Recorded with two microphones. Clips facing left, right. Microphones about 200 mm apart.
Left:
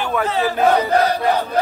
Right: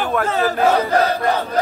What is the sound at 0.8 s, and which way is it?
Battle cry, 15° left (ahead or behind).